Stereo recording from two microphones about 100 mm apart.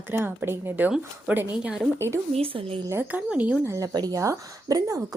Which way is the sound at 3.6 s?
35° right (ahead or behind).